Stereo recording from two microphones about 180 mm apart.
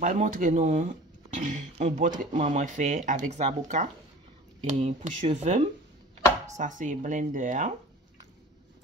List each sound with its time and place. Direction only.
0.0 s speech: 45° right (ahead or behind)